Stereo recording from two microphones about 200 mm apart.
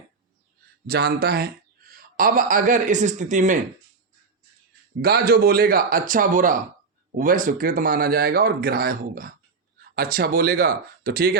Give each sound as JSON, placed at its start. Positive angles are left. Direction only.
{"t": 0.9, "sound": "speech", "side_deg": -55}
{"t": 5.0, "sound": "speech", "side_deg": -50}